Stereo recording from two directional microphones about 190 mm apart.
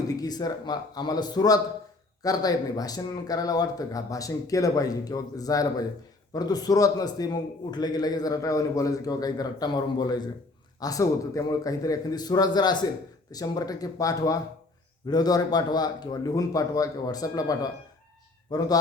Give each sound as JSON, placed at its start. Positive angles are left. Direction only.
{"t": 0.1, "sound": "a man's voice", "side_deg": 20}